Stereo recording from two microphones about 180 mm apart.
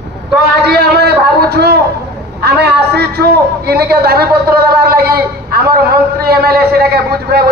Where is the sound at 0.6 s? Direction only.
65° right (ahead or behind).